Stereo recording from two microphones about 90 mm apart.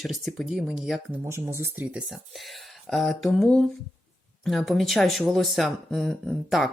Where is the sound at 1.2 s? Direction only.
30° right (ahead or behind); by 2.1 s 15° right (ahead or behind).